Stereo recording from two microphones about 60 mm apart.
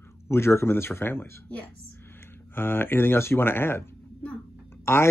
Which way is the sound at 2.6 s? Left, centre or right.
Left.